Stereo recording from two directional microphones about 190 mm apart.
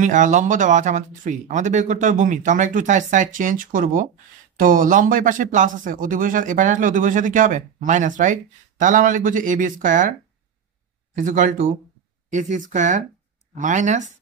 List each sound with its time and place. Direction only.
0.0 s speech: 40° right (ahead or behind)
11.1 s speech: 40° right (ahead or behind)